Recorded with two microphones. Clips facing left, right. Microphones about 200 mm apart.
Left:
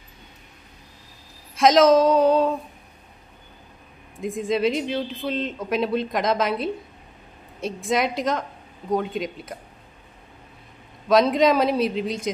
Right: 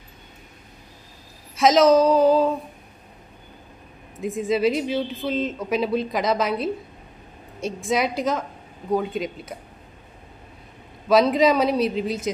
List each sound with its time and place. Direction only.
1.6 s speech: centre (ahead or behind)
4.2 s speech: centre (ahead or behind)
11.1 s speech: centre (ahead or behind)